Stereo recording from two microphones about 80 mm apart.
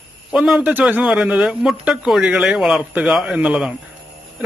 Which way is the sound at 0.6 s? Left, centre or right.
Right.